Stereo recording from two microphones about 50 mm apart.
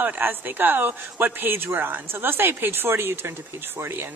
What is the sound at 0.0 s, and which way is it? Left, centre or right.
A woman's voice, right.